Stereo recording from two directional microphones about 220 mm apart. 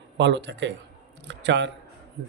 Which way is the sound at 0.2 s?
55° right (ahead or behind).